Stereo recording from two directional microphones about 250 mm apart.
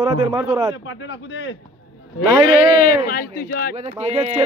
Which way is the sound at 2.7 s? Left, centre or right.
Left.